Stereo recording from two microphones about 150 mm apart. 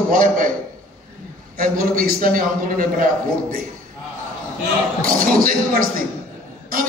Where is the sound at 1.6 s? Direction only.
80° right.